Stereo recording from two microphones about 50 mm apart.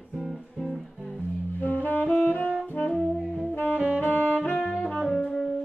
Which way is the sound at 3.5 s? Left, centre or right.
Left.